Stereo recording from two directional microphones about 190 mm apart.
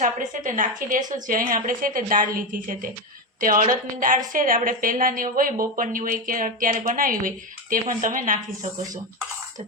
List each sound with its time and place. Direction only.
0.0 s a woman's voice: 45° right (ahead or behind)